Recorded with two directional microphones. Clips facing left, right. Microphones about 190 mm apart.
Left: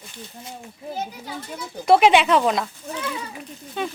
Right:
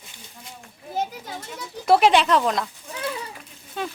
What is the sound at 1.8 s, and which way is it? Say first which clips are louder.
Speech: left 2 dB; centre (ahead or behind).